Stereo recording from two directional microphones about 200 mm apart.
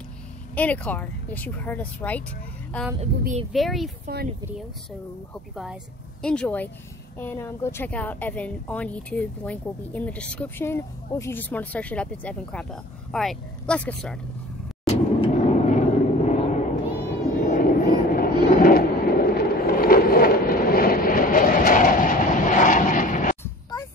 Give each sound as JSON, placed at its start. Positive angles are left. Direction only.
{"t": 0.6, "sound": "a woman's voice", "side_deg": 5}
{"t": 3.0, "sound": "speech", "side_deg": -30}
{"t": 3.5, "sound": "speech", "side_deg": 0}
{"t": 4.0, "sound": "speech", "side_deg": -50}
{"t": 5.3, "sound": "a woman's voice", "side_deg": 0}
{"t": 14.9, "sound": "vehicle", "side_deg": 30}
{"t": 17.4, "sound": "a sound", "side_deg": 40}
{"t": 23.4, "sound": "music", "side_deg": 15}